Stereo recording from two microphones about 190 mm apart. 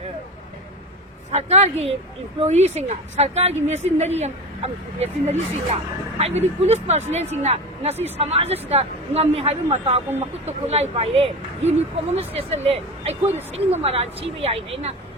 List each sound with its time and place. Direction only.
1.3 s a woman's voice: 35° right (ahead or behind)